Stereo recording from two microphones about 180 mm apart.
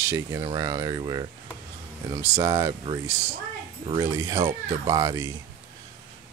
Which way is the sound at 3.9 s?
20° right (ahead or behind).